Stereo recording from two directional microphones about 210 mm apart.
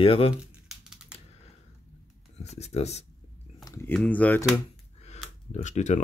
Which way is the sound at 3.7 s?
10° left (ahead or behind).